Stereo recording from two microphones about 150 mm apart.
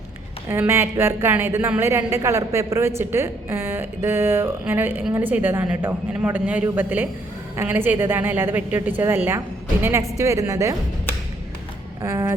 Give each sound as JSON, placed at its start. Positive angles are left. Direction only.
{"t": 0.4, "sound": "a woman's voice", "side_deg": -15}
{"t": 12.0, "sound": "a woman's voice", "side_deg": -20}